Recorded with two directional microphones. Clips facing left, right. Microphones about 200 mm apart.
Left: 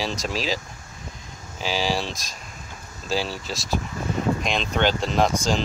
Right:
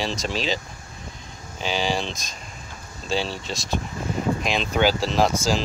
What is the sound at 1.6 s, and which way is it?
Speech, centre (ahead or behind).